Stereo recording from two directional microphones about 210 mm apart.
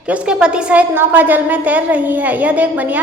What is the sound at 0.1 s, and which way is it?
A woman's voice, 5° right (ahead or behind).